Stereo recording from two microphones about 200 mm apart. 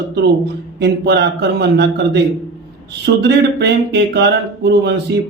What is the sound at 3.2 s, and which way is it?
Speech, 55° right (ahead or behind).